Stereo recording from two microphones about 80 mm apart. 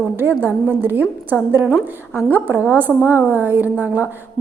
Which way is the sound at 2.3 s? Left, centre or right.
Right.